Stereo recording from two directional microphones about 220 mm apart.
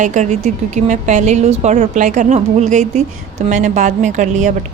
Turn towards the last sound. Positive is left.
turn(degrees=-35)  # may be behind; listen again after turning